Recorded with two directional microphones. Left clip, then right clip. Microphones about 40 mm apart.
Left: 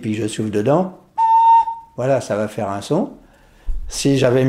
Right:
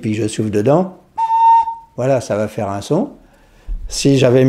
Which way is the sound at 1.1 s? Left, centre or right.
Right.